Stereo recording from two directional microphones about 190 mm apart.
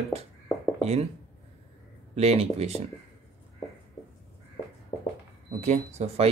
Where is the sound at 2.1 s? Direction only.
35° right (ahead or behind).